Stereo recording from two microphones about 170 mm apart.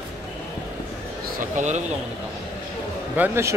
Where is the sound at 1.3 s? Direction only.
45° right (ahead or behind).